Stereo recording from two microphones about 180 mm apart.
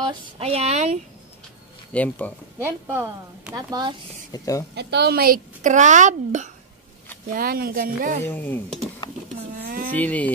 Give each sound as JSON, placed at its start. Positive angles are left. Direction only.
{"t": 0.0, "sound": "speech", "side_deg": -30}
{"t": 1.9, "sound": "speech", "side_deg": 10}
{"t": 2.6, "sound": "speech", "side_deg": -10}
{"t": 4.3, "sound": "speech", "side_deg": 20}
{"t": 4.7, "sound": "speech", "side_deg": -65}
{"t": 7.3, "sound": "speech", "side_deg": -55}
{"t": 8.3, "sound": "speech", "side_deg": 10}
{"t": 9.6, "sound": "a sound", "side_deg": -50}
{"t": 9.9, "sound": "speech", "side_deg": 10}